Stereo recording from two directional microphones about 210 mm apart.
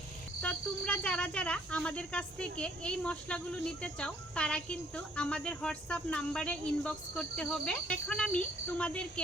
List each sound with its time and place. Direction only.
0.4 s speech: 5° left (ahead or behind)